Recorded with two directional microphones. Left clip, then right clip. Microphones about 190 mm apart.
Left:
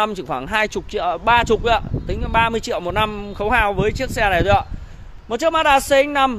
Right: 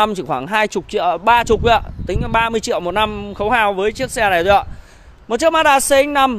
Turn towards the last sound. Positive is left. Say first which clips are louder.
# right 2 dB
turn(degrees=-35)  # may be behind; listen again after turning